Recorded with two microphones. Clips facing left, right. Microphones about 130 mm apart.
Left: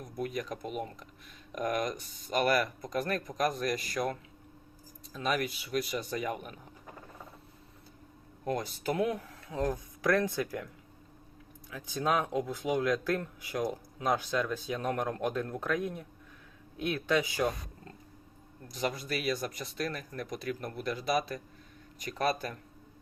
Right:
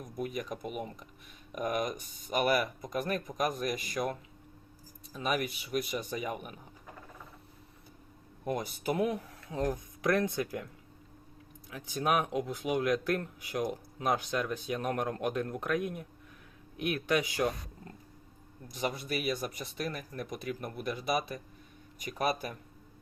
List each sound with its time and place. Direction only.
0.2 s speech: 5° right (ahead or behind)
8.4 s speech: 15° right (ahead or behind)
11.7 s speech: 20° right (ahead or behind)
17.1 s speech: 20° right (ahead or behind)
18.7 s speech: 15° right (ahead or behind)